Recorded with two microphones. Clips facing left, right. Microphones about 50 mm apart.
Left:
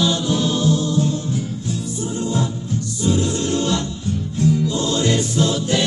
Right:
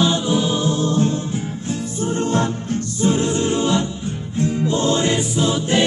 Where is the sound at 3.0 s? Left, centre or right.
Right.